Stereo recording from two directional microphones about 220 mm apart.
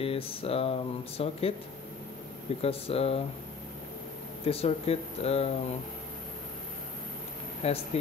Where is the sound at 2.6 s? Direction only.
25° left (ahead or behind).